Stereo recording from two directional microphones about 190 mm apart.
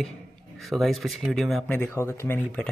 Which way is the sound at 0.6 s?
Centre (ahead or behind).